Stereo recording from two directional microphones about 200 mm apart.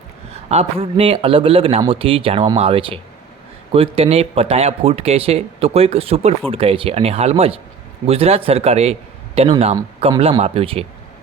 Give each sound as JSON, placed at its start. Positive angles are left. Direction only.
{"t": 0.4, "sound": "a man's voice", "side_deg": -30}